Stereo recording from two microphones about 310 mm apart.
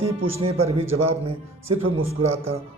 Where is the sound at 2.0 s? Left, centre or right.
Centre.